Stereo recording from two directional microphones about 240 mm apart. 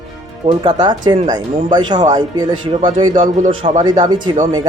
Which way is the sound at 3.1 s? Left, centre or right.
Right.